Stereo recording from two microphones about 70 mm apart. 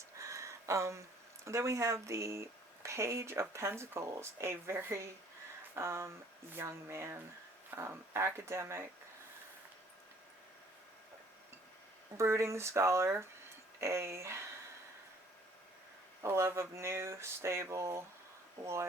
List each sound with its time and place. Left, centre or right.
0.2 s a sound: right
1.5 s speech: right
12.1 s speech: right
16.2 s speech: right